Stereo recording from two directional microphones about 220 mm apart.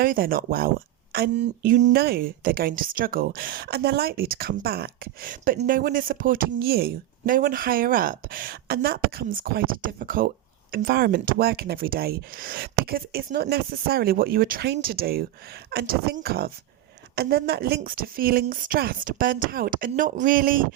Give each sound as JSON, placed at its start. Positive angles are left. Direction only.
{"t": 0.0, "sound": "a woman's voice", "side_deg": -40}